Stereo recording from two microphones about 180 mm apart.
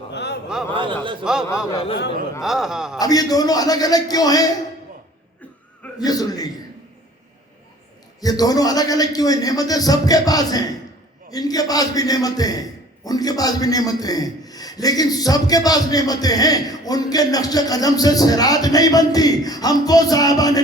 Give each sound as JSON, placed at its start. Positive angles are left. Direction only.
{"t": 0.1, "sound": "a sound", "side_deg": 70}
{"t": 0.7, "sound": "a man's voice", "side_deg": -25}
{"t": 1.2, "sound": "a man's voice", "side_deg": -5}
{"t": 3.0, "sound": "a man's voice", "side_deg": 20}
{"t": 6.0, "sound": "a man's voice", "side_deg": 20}
{"t": 8.2, "sound": "a man's voice", "side_deg": 20}